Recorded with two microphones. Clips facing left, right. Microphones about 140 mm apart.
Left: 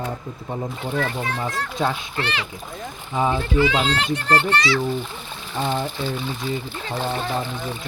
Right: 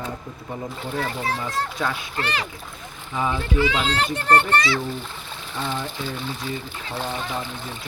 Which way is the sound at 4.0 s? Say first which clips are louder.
Right 1 dB; 45° right (ahead or behind).